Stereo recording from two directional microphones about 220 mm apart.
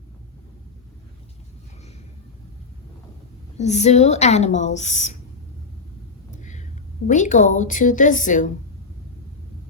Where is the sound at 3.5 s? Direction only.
30° left (ahead or behind).